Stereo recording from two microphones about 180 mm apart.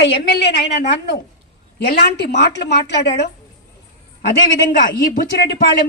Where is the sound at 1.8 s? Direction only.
60° left (ahead or behind).